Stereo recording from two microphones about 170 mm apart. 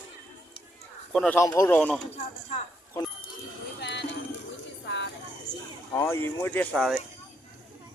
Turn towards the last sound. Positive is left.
turn(degrees=0)  # may be behind; listen again after turning